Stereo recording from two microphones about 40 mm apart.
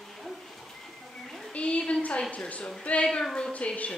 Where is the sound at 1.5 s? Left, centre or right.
Left.